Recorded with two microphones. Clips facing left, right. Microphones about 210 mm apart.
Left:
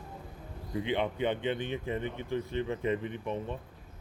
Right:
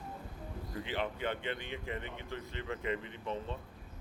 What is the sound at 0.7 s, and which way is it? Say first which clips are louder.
Speech: left 7 dB; 15° left (ahead or behind).